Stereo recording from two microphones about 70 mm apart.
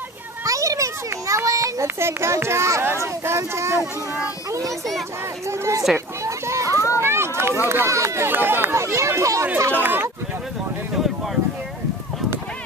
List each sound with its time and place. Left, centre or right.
0.4 s a child's voice: right
4.5 s a child's voice: right
6.2 s children playing: right
7.0 s a sound: right
7.6 s speech: right
8.3 s speech: right
9.6 s speech: right